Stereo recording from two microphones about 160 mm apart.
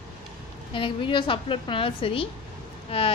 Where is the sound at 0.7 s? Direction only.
30° left (ahead or behind).